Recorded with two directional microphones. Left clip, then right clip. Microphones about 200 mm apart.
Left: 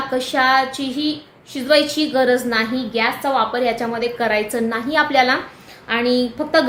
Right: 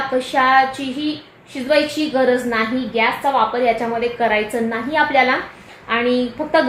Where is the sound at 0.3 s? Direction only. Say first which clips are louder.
Right 2 dB; 5° left (ahead or behind).